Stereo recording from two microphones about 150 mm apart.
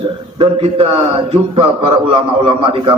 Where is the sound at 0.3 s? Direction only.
40° right (ahead or behind).